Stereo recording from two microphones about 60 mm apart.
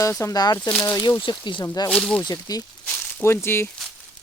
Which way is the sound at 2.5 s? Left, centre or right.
Left.